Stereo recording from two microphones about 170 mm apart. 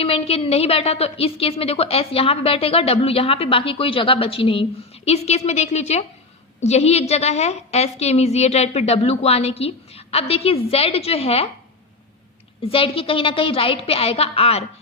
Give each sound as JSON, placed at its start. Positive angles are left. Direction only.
{"t": 0.0, "sound": "a woman's voice", "side_deg": 35}
{"t": 12.6, "sound": "a woman's voice", "side_deg": 35}